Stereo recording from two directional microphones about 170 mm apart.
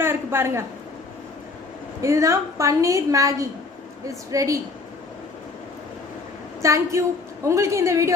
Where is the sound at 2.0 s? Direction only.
20° right (ahead or behind).